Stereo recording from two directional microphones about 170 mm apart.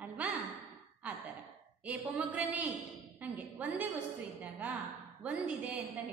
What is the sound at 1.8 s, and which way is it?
A woman's voice, 10° right (ahead or behind).